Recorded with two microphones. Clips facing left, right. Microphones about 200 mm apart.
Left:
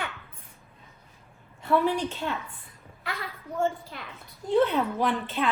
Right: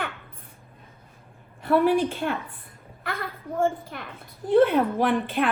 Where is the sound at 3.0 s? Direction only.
50° right (ahead or behind).